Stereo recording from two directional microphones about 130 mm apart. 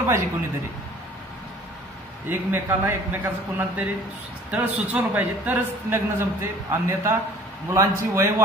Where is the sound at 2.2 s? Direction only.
15° right (ahead or behind).